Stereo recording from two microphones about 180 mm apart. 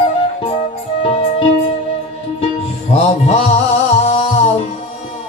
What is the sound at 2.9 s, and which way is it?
Music, 35° left (ahead or behind).